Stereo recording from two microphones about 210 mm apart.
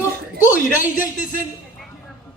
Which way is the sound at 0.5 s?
40° left (ahead or behind).